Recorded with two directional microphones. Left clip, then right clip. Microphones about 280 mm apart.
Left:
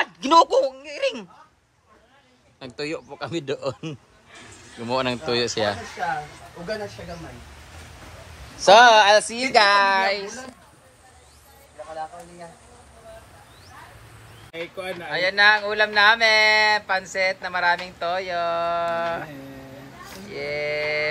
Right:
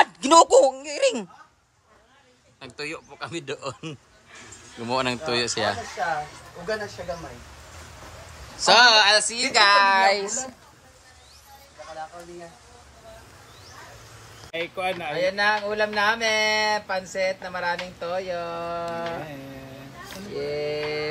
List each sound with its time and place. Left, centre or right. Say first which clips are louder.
0.0 s speech: right 1 dB; centre
2.6 s a man's voice: left 4 dB; centre
8.5 s a woman's voice: left 3 dB; centre; by 10.4 s right
14.6 s a woman's voice: right 4 dB; centre